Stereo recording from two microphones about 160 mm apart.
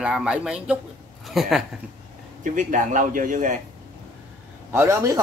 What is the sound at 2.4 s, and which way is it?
A man's voice, 55° right (ahead or behind).